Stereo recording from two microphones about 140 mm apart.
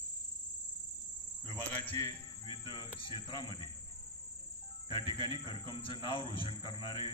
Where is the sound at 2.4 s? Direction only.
35° left (ahead or behind).